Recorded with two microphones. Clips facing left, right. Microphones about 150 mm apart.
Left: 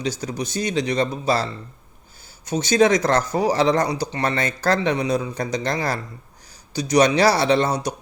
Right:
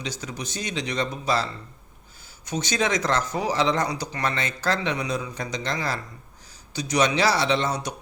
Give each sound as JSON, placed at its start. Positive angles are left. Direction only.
{"t": 0.0, "sound": "speech", "side_deg": 35}